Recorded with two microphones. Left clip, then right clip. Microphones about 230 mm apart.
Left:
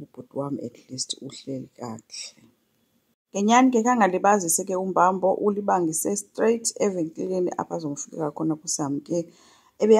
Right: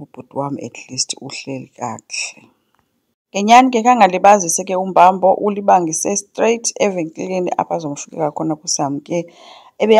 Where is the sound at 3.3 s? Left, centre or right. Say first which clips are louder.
Right 9 dB; right.